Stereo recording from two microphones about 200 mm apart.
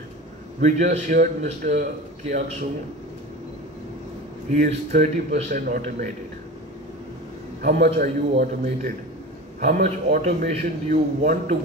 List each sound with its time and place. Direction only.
0.6 s a man's voice: 35° right (ahead or behind)
4.6 s a man's voice: 35° right (ahead or behind)
7.6 s a man's voice: 50° right (ahead or behind)
9.6 s a man's voice: 35° right (ahead or behind)